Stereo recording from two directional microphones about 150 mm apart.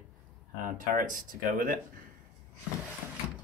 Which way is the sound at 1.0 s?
65° right (ahead or behind).